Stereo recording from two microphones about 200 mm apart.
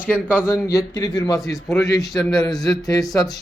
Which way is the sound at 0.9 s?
20° left (ahead or behind).